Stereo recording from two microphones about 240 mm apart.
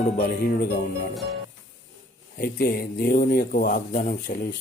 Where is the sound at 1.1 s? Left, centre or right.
Centre.